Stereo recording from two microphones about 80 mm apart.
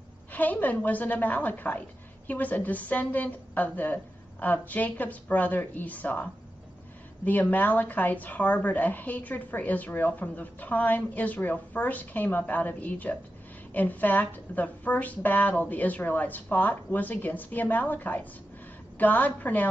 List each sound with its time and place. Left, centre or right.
0.3 s speech: left
7.2 s speech: left